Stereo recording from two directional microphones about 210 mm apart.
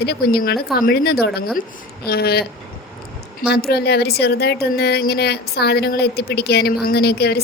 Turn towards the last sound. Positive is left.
turn(degrees=50)  # may be behind; listen again after turning